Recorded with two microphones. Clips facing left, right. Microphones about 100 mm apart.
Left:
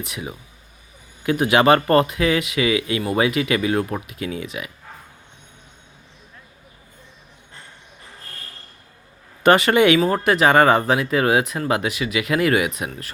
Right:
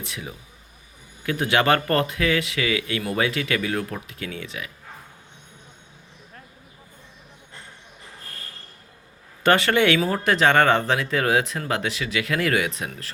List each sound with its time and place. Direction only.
0.0 s speech: 15° left (ahead or behind)
9.4 s speech: 15° left (ahead or behind)